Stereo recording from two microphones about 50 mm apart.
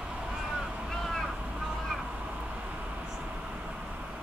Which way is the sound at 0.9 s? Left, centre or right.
Centre.